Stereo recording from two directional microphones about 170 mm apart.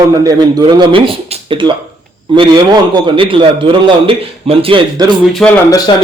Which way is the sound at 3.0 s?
30° right (ahead or behind).